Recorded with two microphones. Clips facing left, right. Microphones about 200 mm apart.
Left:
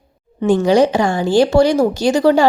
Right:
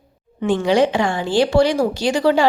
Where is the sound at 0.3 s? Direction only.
40° left (ahead or behind).